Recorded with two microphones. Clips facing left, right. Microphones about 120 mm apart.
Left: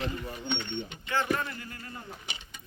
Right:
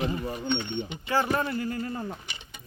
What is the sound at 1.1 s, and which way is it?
Speech, 35° right (ahead or behind).